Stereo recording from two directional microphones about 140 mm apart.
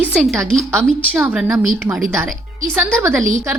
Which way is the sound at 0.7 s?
20° right (ahead or behind).